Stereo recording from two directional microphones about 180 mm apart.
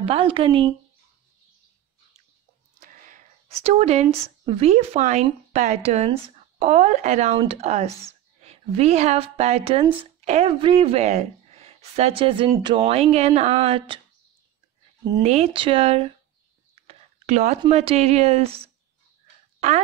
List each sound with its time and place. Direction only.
0.0 s speech: 30° right (ahead or behind)
2.8 s a woman's voice: 45° right (ahead or behind); by 14.0 s 30° right (ahead or behind)
15.2 s speech: 35° right (ahead or behind)
16.8 s a sound: 40° right (ahead or behind)
17.6 s speech: 35° right (ahead or behind)